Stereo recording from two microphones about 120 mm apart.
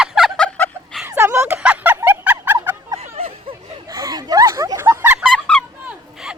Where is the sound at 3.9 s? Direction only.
30° right (ahead or behind); by 5.3 s 15° right (ahead or behind).